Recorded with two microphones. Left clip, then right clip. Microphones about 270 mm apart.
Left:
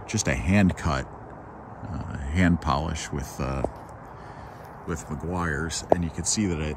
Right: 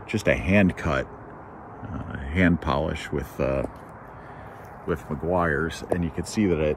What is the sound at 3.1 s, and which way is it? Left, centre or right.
Speech, centre.